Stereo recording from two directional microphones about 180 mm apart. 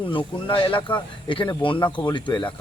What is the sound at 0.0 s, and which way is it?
Speech, 30° left (ahead or behind).